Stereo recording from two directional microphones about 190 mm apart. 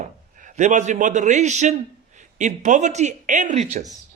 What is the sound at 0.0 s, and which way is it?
A man's voice, 40° right (ahead or behind).